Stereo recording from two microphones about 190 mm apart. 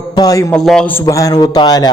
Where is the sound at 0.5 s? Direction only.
5° left (ahead or behind); by 1.9 s 20° left (ahead or behind).